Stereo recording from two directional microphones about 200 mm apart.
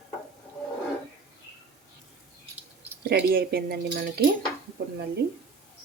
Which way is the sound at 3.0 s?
50° right (ahead or behind).